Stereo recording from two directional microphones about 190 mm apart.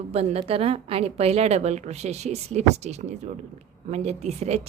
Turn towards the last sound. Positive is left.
turn(degrees=-35)  # may be behind; listen again after turning